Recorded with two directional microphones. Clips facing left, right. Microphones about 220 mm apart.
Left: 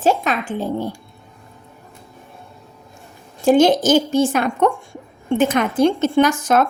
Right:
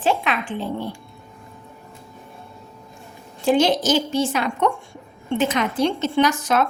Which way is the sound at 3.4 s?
50° left (ahead or behind).